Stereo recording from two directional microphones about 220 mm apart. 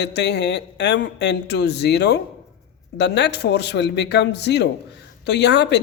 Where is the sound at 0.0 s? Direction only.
50° left (ahead or behind).